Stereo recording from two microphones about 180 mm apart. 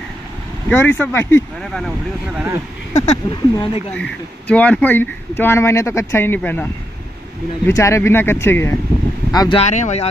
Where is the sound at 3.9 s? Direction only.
5° left (ahead or behind).